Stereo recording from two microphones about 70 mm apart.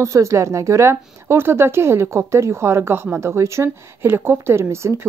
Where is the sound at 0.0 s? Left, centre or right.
Right.